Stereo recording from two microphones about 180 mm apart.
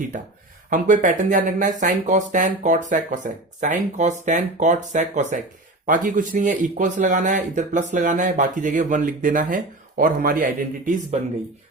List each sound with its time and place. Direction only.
0.7 s speech: 45° right (ahead or behind)